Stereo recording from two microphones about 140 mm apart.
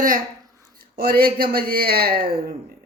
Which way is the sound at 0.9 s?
90° right.